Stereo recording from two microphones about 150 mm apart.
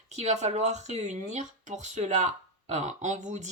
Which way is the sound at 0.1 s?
50° right (ahead or behind).